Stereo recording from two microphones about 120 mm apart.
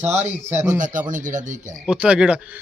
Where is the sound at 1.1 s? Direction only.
90° right.